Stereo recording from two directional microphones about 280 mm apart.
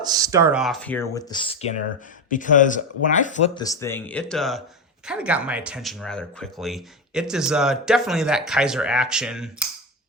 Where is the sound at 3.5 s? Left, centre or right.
Centre.